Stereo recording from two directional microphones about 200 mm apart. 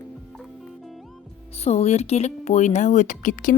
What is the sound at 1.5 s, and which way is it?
Speech, 30° left (ahead or behind).